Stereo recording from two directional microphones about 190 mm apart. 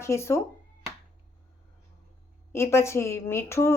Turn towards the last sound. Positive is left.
turn(degrees=15)  # may be behind; listen again after turning